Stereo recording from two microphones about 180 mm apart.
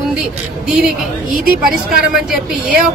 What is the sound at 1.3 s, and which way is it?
Speech, 50° right (ahead or behind).